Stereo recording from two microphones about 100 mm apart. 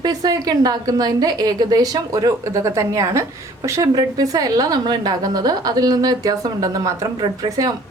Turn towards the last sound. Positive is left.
turn(degrees=-50)  # may be behind; listen again after turning